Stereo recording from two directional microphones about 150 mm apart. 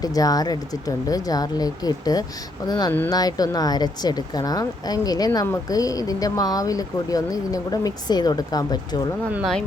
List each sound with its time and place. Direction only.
0.0 s speech: 25° left (ahead or behind)
9.3 s speech: centre (ahead or behind)